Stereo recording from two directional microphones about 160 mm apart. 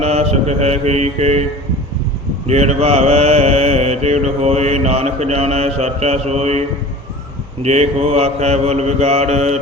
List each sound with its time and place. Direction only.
0.0 s mantra: 40° right (ahead or behind)
2.5 s mantra: 45° right (ahead or behind)